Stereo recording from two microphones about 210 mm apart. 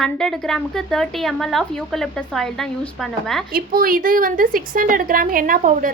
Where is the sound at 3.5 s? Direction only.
45° right (ahead or behind).